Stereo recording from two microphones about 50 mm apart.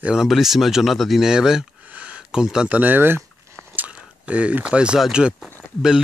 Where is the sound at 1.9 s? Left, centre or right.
Right.